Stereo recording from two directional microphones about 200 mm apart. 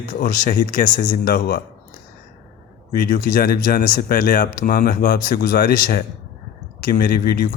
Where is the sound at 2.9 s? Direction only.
45° left (ahead or behind).